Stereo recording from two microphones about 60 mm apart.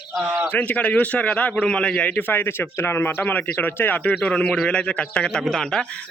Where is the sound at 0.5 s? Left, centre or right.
Left.